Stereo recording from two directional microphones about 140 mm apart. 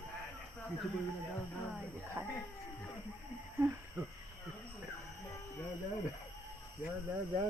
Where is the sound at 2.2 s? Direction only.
20° right (ahead or behind).